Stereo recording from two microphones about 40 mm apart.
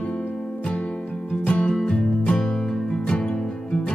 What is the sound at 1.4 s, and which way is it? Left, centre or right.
Music, left.